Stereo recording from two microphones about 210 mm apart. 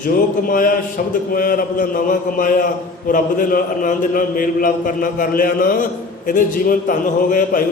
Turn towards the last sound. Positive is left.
turn(degrees=40)  # may be behind; listen again after turning